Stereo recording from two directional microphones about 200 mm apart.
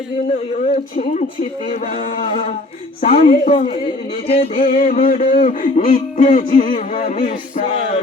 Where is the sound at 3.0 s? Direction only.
35° left (ahead or behind).